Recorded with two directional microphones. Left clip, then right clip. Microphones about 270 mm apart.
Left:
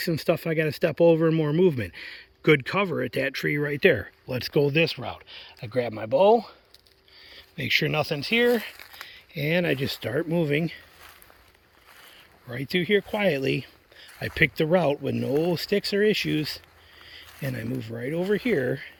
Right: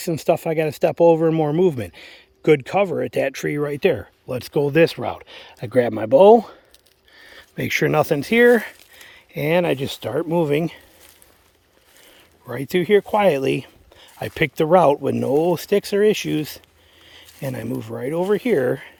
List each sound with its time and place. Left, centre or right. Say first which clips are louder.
0.0 s speech: right 5 dB; centre
4.8 s speech: right 8 dB; right
12.5 s speech: right 6 dB; centre